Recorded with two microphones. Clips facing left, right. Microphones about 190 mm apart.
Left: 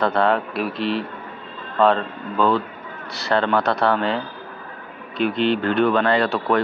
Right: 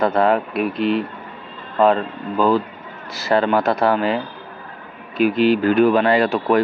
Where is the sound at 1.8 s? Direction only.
5° right (ahead or behind).